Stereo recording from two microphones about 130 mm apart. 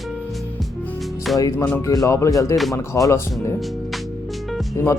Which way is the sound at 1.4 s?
25° left (ahead or behind).